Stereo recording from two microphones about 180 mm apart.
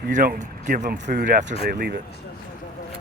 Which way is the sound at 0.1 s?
50° right (ahead or behind).